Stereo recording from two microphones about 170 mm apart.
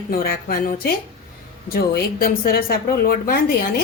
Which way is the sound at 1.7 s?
65° left (ahead or behind).